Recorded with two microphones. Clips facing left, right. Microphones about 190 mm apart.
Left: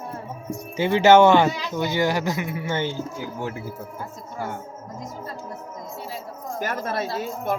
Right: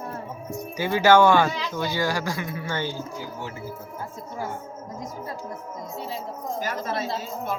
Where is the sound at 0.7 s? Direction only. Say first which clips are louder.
Left 3 dB; 25° left (ahead or behind).